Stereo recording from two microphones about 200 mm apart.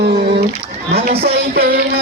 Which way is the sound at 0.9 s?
30° right (ahead or behind).